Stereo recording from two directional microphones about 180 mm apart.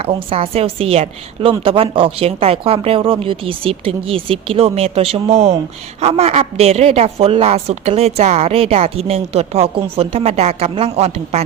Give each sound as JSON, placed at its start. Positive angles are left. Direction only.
{"t": 0.0, "sound": "a woman's voice", "side_deg": -30}